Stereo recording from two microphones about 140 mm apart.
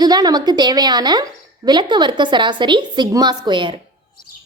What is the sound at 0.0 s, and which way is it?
A woman's voice, 30° right (ahead or behind).